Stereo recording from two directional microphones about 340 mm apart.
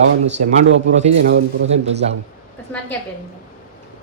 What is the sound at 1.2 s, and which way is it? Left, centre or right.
Speech, right.